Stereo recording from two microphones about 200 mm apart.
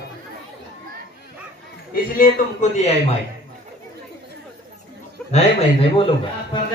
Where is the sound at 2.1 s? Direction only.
45° left (ahead or behind).